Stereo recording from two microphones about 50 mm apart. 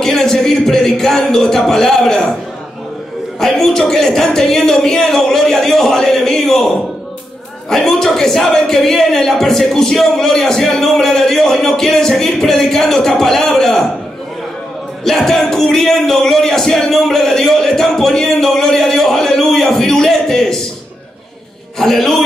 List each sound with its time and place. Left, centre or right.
0.0 s a man's voice: centre
3.3 s a man's voice: centre
7.7 s a man's voice: centre
15.0 s a man's voice: centre
21.7 s a man's voice: centre